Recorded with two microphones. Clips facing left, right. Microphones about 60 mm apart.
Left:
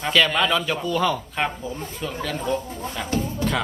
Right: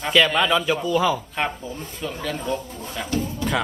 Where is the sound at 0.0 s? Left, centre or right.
Centre.